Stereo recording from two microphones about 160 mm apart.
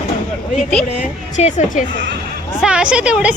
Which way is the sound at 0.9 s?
40° left (ahead or behind).